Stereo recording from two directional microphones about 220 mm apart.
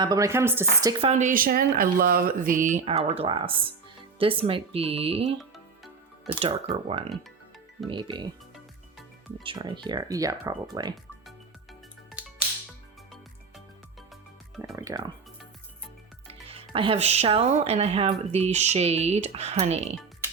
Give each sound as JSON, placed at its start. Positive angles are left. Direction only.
{"t": 0.0, "sound": "speech", "side_deg": -15}
{"t": 1.1, "sound": "speech", "side_deg": -35}
{"t": 9.4, "sound": "speech", "side_deg": -20}
{"t": 14.8, "sound": "speech", "side_deg": -15}
{"t": 16.2, "sound": "speech", "side_deg": -25}